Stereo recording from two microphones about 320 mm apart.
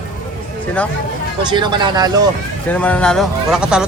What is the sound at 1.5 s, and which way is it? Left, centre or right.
Speech, centre.